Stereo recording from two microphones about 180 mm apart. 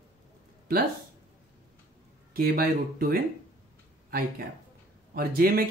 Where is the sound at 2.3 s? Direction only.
55° right (ahead or behind).